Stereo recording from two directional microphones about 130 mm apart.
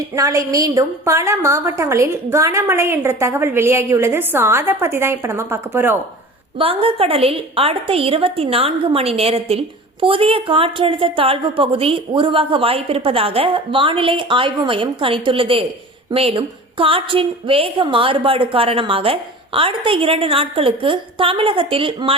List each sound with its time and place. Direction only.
0.2 s a woman's voice: 25° right (ahead or behind)
6.6 s a woman's voice: 45° right (ahead or behind)